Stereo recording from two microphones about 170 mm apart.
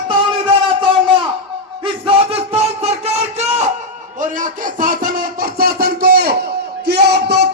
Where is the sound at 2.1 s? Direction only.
35° right (ahead or behind).